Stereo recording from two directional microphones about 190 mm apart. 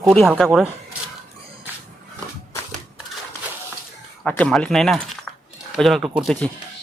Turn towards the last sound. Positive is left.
turn(degrees=5)  # may be behind; listen again after turning